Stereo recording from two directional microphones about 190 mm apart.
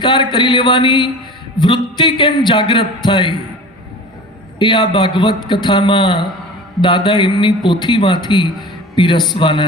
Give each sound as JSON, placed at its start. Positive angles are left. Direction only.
{"t": 0.0, "sound": "a man's voice", "side_deg": 25}
{"t": 4.6, "sound": "a man's voice", "side_deg": 25}